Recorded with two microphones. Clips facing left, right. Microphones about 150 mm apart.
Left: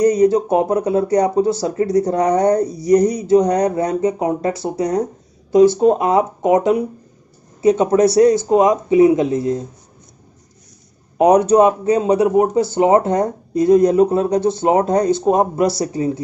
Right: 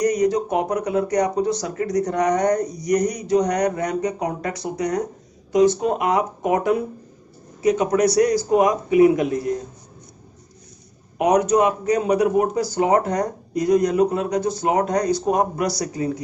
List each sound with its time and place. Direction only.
0.0 s speech: 30° left (ahead or behind)
11.1 s speech: 30° left (ahead or behind)